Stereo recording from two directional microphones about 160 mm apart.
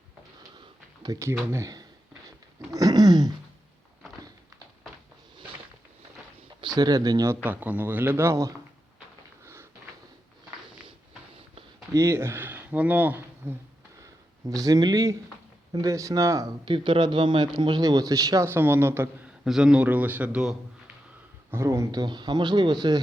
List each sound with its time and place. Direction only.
0.5 s a sound: 25° right (ahead or behind)
1.5 s speech: 20° right (ahead or behind)
2.7 s a sound: 25° right (ahead or behind)
6.7 s speech: 25° right (ahead or behind)
7.4 s a man's voice: 10° right (ahead or behind)
9.4 s a sound: 15° right (ahead or behind)
11.9 s speech: 15° right (ahead or behind)
14.0 s a sound: 20° right (ahead or behind)
15.7 s speech: 20° right (ahead or behind)
16.6 s speech: 35° right (ahead or behind); by 19.3 s 15° right (ahead or behind)
19.5 s a man's voice: 5° right (ahead or behind)
21.5 s speech: 20° right (ahead or behind)